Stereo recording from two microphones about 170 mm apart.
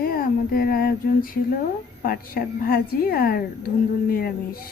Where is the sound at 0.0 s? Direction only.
60° left (ahead or behind).